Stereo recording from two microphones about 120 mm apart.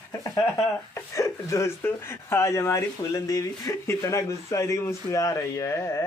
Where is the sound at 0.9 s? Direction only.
25° left (ahead or behind).